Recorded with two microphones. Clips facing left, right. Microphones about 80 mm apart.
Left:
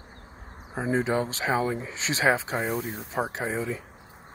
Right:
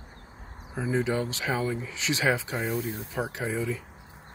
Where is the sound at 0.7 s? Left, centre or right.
Left.